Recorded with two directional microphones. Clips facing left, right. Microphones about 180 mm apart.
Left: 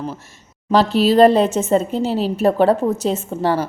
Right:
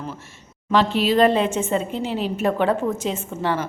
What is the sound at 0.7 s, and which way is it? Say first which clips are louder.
A woman's voice: left 4 dB; 40° left (ahead or behind).